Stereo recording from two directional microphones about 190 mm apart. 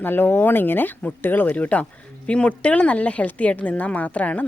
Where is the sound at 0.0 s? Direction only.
10° left (ahead or behind).